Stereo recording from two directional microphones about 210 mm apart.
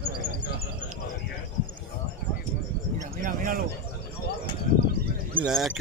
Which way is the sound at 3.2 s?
40° right (ahead or behind).